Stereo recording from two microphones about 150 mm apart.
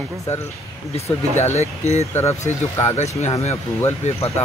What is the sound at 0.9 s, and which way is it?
Speech, 45° left (ahead or behind).